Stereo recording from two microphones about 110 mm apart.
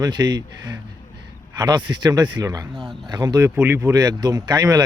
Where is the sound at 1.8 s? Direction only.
40° right (ahead or behind).